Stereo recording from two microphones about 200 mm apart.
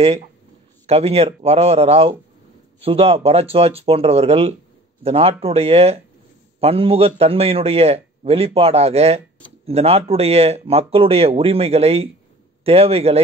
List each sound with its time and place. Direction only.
0.8 s a man's voice: 30° right (ahead or behind)